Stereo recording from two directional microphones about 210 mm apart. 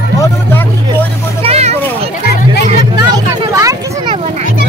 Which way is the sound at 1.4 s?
30° right (ahead or behind).